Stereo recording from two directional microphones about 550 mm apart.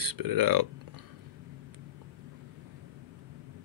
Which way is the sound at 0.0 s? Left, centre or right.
Right.